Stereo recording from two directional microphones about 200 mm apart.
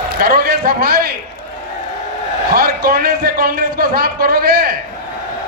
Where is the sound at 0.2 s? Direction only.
50° right (ahead or behind).